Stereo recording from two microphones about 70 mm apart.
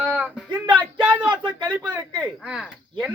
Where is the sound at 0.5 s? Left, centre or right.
Right.